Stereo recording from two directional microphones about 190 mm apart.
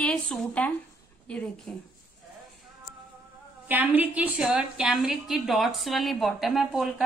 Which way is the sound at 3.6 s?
10° right (ahead or behind).